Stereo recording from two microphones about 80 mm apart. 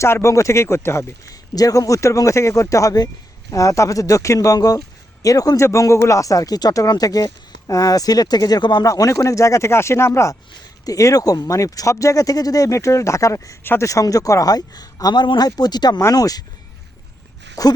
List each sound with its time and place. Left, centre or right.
0.0 s speech: left
8.9 s speech: left
17.5 s speech: left